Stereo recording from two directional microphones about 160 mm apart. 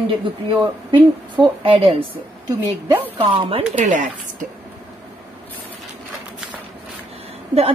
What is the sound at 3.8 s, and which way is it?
Speech, 55° right (ahead or behind).